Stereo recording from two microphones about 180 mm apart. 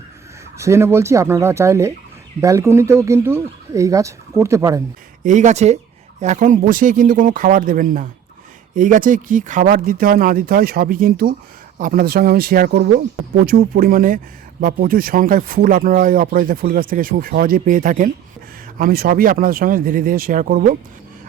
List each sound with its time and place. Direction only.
0.5 s speech: 15° right (ahead or behind)
5.2 s speech: 45° right (ahead or behind)